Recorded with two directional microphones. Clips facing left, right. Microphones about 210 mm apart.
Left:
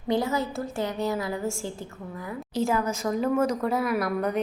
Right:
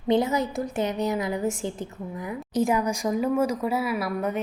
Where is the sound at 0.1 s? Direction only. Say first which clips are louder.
Right 3 dB; 20° right (ahead or behind).